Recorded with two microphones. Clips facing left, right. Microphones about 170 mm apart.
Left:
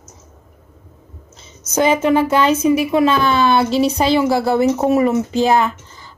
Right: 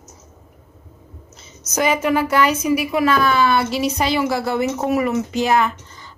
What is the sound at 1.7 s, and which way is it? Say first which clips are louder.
A woman's voice: left 4 dB; 30° left (ahead or behind).